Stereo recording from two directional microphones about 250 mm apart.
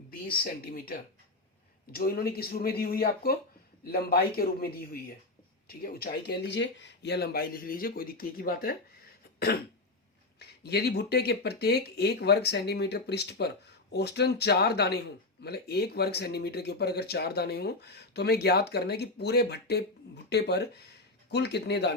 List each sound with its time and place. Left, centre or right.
0.4 s speech: left
10.6 s a man's voice: left